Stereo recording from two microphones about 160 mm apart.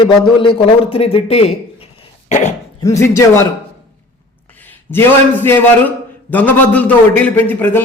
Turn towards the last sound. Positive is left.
turn(degrees=10)  # may be behind; listen again after turning